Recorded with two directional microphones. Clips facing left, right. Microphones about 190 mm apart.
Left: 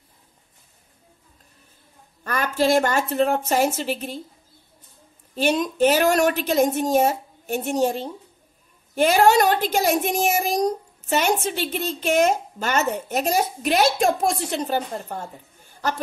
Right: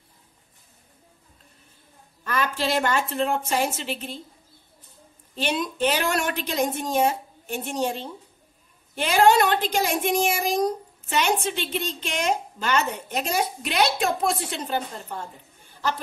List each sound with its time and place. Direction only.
2.2 s a woman's voice: 45° left (ahead or behind)
5.3 s a woman's voice: 45° left (ahead or behind)